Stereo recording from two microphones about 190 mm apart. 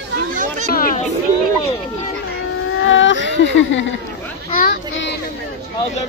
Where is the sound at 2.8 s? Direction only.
75° left (ahead or behind).